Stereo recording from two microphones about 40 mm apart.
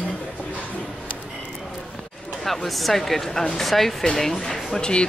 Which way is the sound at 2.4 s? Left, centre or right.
Centre.